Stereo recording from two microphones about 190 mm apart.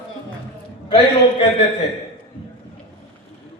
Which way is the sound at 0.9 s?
30° left (ahead or behind).